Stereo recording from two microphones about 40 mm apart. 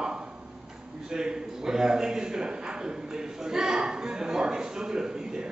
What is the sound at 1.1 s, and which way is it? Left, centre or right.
A man's voice, centre.